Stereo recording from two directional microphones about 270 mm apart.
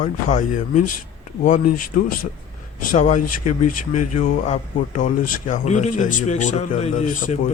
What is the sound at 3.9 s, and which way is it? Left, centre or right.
Speech, left.